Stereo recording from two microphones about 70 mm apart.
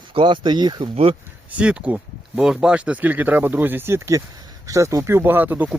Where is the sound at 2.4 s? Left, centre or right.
Centre; by 5.1 s right.